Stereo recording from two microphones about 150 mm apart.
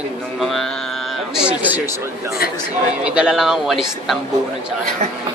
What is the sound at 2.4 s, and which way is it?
Speech, 80° left.